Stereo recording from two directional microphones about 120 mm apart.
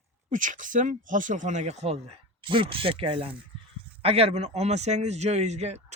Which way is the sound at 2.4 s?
45° right (ahead or behind).